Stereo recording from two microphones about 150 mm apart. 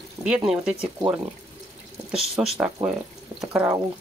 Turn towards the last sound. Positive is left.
turn(degrees=-10)  # may be behind; listen again after turning